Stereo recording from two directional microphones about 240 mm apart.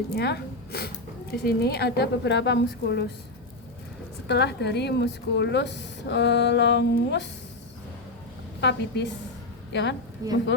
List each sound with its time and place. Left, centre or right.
0.1 s a woman's voice: left
4.3 s a woman's voice: left
8.6 s a woman's voice: left
10.2 s speech: centre